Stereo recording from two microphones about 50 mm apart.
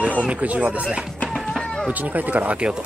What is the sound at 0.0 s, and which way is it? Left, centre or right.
Speech, right.